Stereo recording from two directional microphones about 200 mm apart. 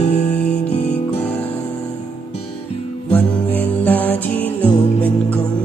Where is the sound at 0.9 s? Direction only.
10° left (ahead or behind).